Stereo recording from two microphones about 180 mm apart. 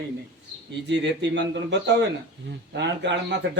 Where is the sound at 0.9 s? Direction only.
75° right (ahead or behind).